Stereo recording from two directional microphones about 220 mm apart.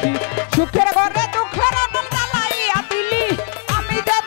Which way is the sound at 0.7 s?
20° left (ahead or behind).